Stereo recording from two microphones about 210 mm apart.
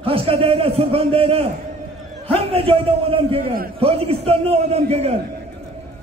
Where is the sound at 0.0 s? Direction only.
25° right (ahead or behind).